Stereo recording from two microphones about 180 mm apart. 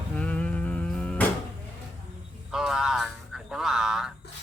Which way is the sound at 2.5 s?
5° right (ahead or behind).